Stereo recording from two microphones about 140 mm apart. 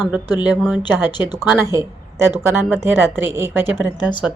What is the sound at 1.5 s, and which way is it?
A woman's voice, 20° right (ahead or behind).